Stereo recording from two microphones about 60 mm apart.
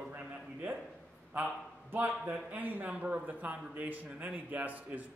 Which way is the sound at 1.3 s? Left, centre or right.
Right.